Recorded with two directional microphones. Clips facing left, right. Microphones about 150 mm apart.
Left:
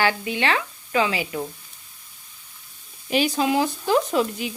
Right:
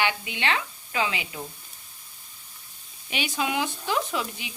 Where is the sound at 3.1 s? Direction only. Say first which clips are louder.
Left 8 dB; 40° left (ahead or behind).